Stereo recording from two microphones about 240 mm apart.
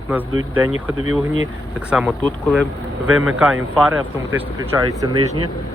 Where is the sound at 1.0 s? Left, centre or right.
Right.